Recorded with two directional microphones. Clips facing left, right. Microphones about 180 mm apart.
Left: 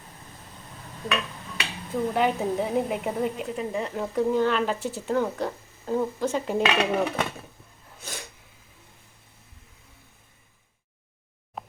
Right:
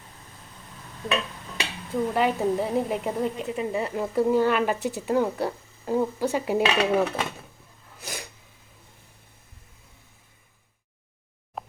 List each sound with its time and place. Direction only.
1.0 s a sound: 30° right (ahead or behind)
1.9 s a woman's voice: centre (ahead or behind)
8.0 s sneeze: 10° right (ahead or behind)
11.6 s plop: centre (ahead or behind)